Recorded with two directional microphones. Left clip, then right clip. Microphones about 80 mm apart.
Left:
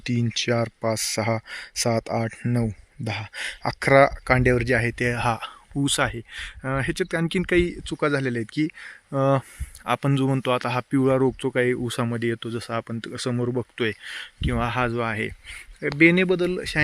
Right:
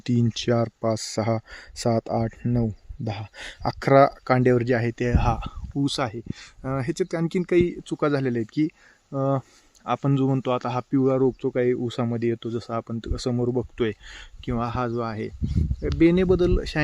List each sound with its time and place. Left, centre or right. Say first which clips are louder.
0.0 s speech: even; right
2.2 s speech: even; centre
5.7 s speech: left 2 dB; centre
8.0 s speech: even; right
9.1 s speech: left 4 dB; centre
9.8 s speech: left 1 dB; centre
10.9 s speech: even; centre
11.4 s speech: even; centre
12.2 s speech: right 1 dB; centre
14.5 s speech: left 2 dB; centre
16.3 s speech: right 2 dB; right
16.6 s speech: left 2 dB; right